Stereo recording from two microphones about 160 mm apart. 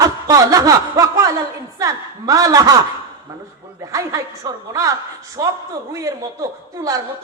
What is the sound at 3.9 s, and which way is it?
A woman's voice, 20° right (ahead or behind).